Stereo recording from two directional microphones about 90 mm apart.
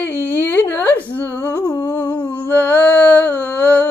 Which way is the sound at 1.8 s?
20° left (ahead or behind).